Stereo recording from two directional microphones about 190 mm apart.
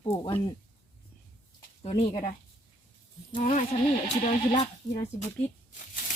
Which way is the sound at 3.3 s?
25° left (ahead or behind).